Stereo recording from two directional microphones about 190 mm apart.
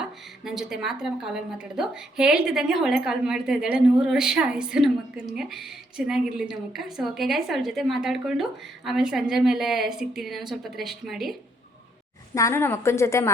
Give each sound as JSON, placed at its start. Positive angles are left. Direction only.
{"t": 0.4, "sound": "a woman's voice", "side_deg": 0}
{"t": 12.3, "sound": "a woman's voice", "side_deg": 15}